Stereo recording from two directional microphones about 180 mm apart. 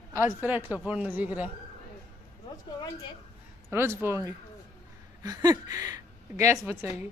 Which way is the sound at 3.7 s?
15° right (ahead or behind).